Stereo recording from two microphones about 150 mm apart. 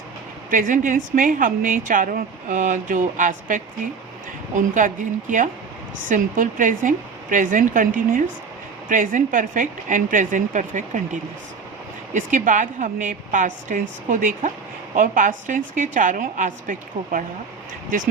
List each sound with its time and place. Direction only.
0.5 s a woman's voice: 60° right (ahead or behind)
12.1 s a woman's voice: 60° right (ahead or behind)